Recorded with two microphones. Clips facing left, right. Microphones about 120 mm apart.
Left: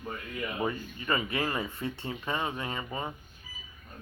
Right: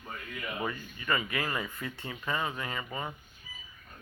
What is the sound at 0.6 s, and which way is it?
Speech, 30° left (ahead or behind).